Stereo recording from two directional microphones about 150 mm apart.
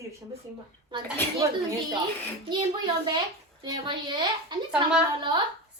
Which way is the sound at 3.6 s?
30° right (ahead or behind).